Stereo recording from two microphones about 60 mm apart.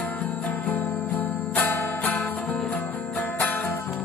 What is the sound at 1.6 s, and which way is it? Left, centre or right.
Music, left.